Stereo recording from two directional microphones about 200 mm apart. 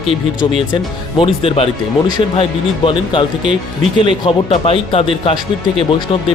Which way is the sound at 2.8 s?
25° left (ahead or behind).